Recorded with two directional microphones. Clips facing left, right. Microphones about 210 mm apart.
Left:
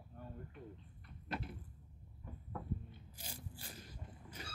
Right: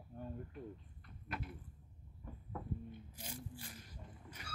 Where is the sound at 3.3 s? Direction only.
35° left (ahead or behind).